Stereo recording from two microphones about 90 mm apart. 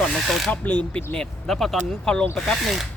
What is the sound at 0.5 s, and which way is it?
Speech, 20° left (ahead or behind).